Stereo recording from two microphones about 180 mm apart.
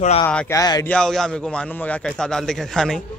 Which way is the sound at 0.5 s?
20° left (ahead or behind).